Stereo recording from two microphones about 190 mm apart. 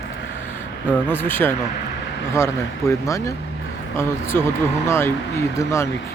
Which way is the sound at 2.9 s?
15° left (ahead or behind).